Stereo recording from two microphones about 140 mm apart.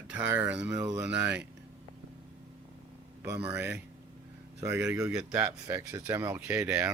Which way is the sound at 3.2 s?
20° right (ahead or behind).